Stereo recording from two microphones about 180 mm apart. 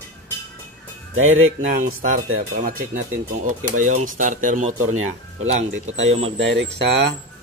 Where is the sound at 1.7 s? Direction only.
45° right (ahead or behind).